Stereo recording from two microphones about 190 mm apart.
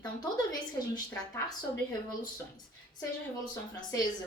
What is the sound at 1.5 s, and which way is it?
Speech, 20° left (ahead or behind).